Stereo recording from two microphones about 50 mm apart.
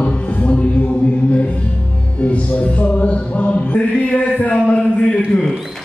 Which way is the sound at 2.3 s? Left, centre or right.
Left.